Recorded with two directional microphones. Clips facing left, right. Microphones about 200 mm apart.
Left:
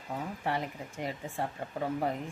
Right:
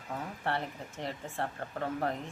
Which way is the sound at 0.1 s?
10° left (ahead or behind).